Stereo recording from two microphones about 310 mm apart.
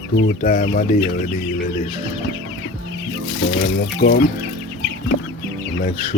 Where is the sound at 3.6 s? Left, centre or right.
Left.